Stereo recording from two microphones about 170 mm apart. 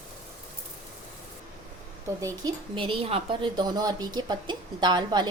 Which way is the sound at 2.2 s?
25° right (ahead or behind).